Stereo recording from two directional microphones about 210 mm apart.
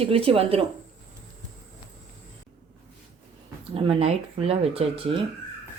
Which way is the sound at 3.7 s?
25° right (ahead or behind).